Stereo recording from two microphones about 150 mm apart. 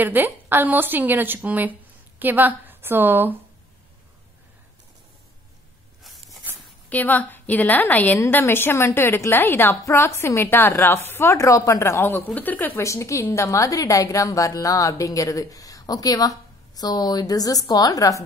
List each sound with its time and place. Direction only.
0.0 s a woman's voice: 10° right (ahead or behind)
6.9 s a woman's voice: 10° left (ahead or behind)